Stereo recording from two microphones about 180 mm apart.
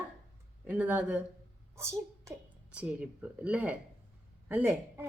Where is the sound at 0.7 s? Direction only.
5° right (ahead or behind).